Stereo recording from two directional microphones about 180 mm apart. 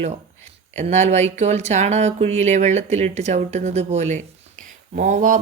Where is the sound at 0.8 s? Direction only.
40° right (ahead or behind).